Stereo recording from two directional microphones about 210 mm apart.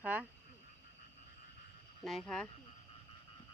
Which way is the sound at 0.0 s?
5° right (ahead or behind).